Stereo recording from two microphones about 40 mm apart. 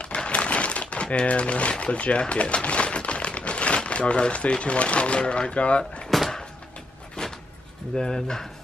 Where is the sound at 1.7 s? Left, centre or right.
Left.